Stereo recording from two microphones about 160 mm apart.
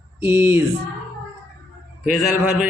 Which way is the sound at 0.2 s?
15° right (ahead or behind).